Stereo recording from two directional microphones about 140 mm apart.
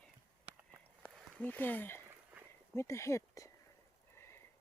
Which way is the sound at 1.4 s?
10° left (ahead or behind).